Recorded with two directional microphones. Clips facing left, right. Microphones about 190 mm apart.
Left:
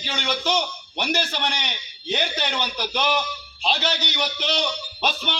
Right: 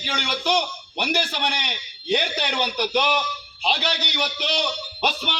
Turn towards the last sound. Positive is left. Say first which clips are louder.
# right 1 dB
turn(degrees=-10)  # may be behind; listen again after turning